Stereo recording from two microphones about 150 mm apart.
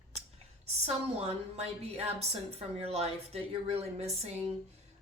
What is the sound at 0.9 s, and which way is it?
A woman's voice, 45° right (ahead or behind).